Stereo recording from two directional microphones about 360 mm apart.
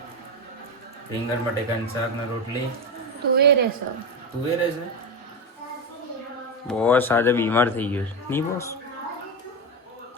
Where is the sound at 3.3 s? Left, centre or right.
Right.